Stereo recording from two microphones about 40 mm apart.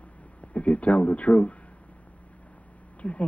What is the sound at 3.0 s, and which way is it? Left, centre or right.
Speech, left.